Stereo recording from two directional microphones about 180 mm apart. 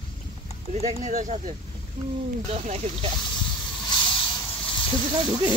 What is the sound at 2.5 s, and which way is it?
Speech, 40° right (ahead or behind).